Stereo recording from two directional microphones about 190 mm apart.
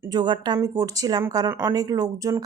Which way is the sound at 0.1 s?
25° right (ahead or behind).